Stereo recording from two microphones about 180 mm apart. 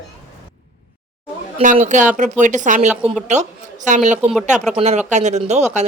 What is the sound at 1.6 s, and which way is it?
Speech, 45° right (ahead or behind).